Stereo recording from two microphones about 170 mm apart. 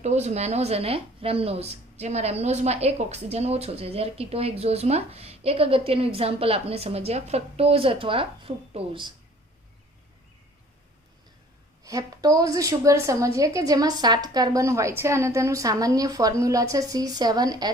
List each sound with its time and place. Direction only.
0.0 s a woman's voice: 40° right (ahead or behind)
11.8 s a woman's voice: 20° right (ahead or behind)